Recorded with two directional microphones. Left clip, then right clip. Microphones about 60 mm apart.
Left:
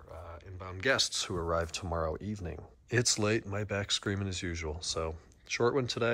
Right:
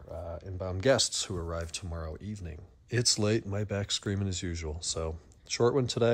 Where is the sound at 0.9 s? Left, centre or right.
Right.